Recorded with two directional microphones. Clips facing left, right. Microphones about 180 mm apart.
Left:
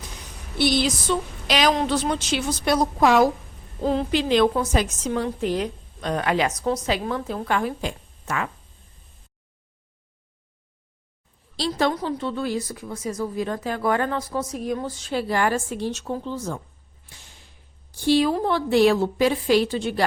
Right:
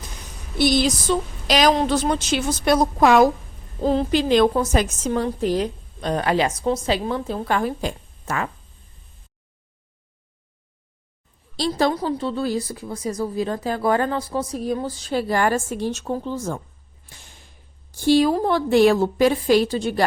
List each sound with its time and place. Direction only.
0.6 s a woman's voice: 45° right (ahead or behind)
3.8 s a woman's voice: 40° right (ahead or behind)
11.7 s a woman's voice: 35° right (ahead or behind)
17.1 s whip: 50° right (ahead or behind)
17.9 s a woman's voice: 45° right (ahead or behind)